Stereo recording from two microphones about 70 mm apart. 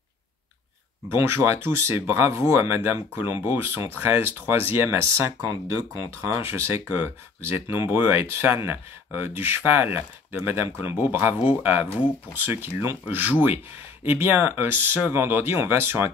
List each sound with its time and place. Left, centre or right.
1.1 s speech: right